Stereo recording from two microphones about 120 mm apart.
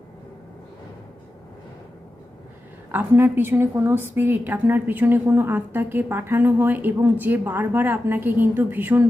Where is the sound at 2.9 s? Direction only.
20° right (ahead or behind).